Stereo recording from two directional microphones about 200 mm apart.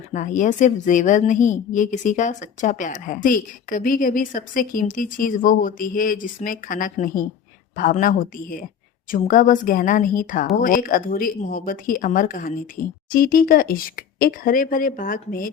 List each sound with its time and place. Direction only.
0.1 s a woman's voice: 40° left (ahead or behind)